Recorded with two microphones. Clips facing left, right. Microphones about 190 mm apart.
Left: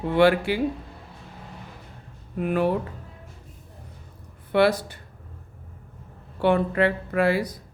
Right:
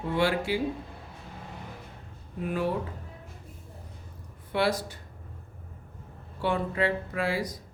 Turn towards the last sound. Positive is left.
turn(degrees=60)  # may be behind; listen again after turning